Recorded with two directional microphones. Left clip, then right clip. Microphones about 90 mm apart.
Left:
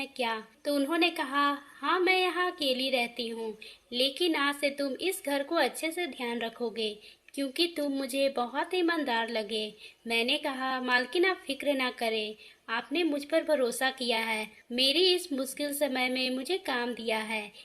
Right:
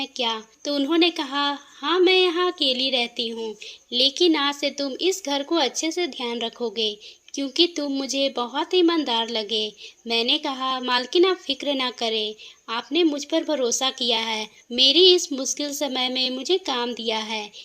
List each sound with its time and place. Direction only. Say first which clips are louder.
0.0 s speech: right 6 dB; 35° right (ahead or behind)